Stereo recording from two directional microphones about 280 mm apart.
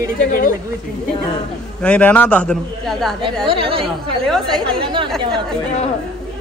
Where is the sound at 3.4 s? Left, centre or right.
Centre.